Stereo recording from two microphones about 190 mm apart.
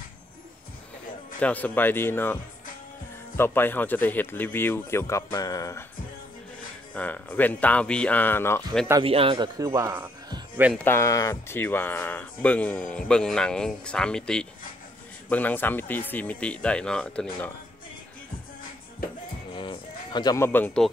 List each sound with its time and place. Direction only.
1.4 s speech: 10° left (ahead or behind)
6.9 s speech: 5° left (ahead or behind)
9.0 s speech: 30° right (ahead or behind)
9.7 s a man's voice: 15° right (ahead or behind)
10.8 s speech: 10° left (ahead or behind)
19.5 s a sound: 25° left (ahead or behind); by 20.9 s 5° left (ahead or behind)